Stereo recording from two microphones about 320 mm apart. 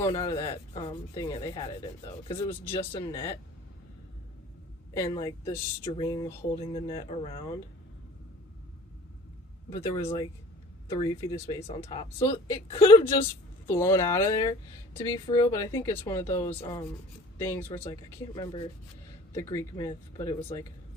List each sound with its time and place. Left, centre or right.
0.0 s speech: centre
4.9 s speech: centre
9.9 s speech: centre